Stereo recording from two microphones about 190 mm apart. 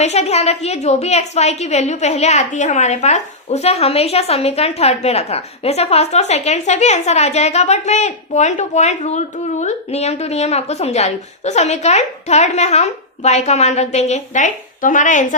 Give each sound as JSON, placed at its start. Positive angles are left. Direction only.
{"t": 0.0, "sound": "a woman's voice", "side_deg": 35}